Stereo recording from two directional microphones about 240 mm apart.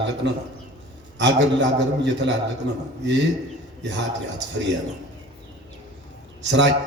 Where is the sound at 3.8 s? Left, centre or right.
Right.